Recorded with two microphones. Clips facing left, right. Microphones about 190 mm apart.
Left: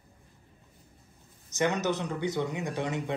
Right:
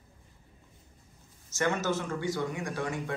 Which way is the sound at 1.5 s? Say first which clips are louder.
Left 1 dB; 20° left (ahead or behind).